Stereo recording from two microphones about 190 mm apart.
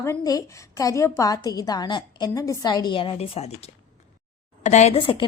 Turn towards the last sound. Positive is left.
turn(degrees=25)  # may be behind; listen again after turning